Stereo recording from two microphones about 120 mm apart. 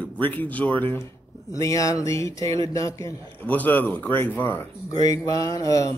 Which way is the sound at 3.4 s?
15° left (ahead or behind).